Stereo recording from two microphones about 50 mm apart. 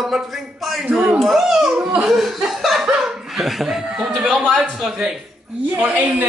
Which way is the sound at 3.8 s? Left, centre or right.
Centre.